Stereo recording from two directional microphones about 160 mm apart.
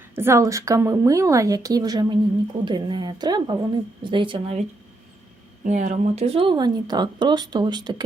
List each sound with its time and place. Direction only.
0.2 s speech: 15° right (ahead or behind)
5.6 s speech: 45° right (ahead or behind); by 8.0 s 25° right (ahead or behind)